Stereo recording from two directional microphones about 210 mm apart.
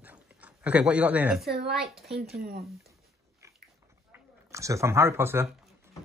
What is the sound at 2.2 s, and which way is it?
Speech, 45° right (ahead or behind).